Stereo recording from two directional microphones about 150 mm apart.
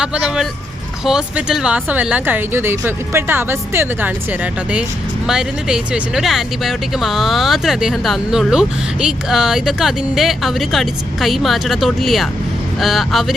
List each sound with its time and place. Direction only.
0.0 s speech: 5° right (ahead or behind)